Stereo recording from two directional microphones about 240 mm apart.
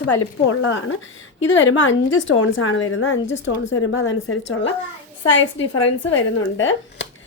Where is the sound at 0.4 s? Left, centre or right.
Left.